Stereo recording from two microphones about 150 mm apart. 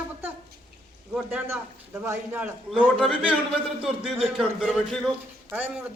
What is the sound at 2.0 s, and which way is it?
Speech, 15° right (ahead or behind).